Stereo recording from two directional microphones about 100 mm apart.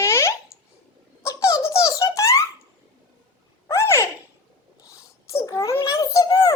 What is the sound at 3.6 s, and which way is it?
Babbling, 30° left (ahead or behind).